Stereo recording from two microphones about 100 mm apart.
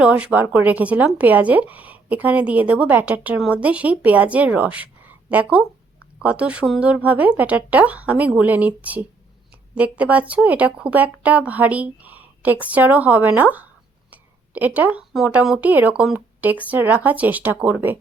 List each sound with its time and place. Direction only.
0.0 s a woman's voice: 15° right (ahead or behind)
14.1 s a sound: 15° right (ahead or behind)
15.4 s a woman's voice: 5° right (ahead or behind)